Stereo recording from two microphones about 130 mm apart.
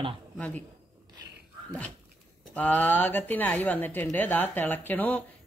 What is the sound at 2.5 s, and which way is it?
Speech, 10° left (ahead or behind).